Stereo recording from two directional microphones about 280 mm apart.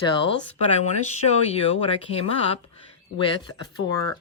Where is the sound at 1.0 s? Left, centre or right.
Left.